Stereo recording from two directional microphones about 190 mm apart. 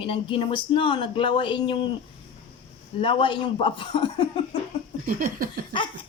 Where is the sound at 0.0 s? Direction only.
25° left (ahead or behind).